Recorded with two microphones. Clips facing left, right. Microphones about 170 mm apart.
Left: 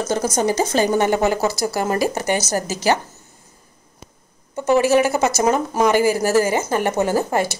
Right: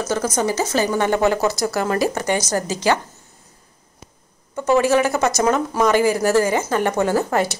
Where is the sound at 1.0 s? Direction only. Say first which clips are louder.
Even; 5° left (ahead or behind).